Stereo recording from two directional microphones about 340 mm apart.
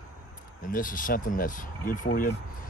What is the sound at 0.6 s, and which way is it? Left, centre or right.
Speech, left.